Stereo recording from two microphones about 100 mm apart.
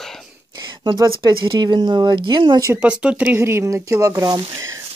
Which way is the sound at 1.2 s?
45° right (ahead or behind).